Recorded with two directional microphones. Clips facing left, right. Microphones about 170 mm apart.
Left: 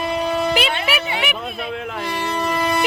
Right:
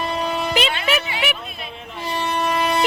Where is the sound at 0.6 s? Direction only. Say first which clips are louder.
Even; 10° left (ahead or behind).